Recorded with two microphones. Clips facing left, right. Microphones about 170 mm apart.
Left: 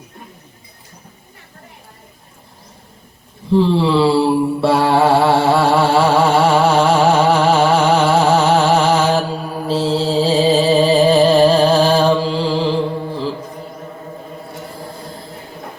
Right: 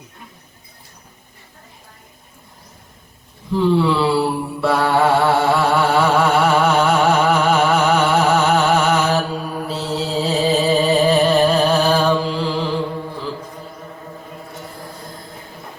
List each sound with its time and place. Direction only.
3.5 s mantra: 30° left (ahead or behind)